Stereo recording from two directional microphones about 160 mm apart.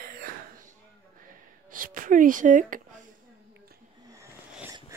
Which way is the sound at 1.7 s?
60° right (ahead or behind).